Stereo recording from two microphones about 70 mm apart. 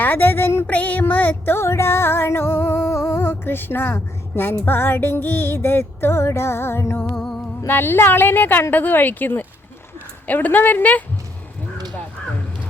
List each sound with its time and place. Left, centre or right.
0.0 s speech: left
0.7 s music: left
10.2 s speech: left